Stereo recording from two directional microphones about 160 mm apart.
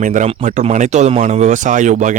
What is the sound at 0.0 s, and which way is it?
Speech, 50° right (ahead or behind).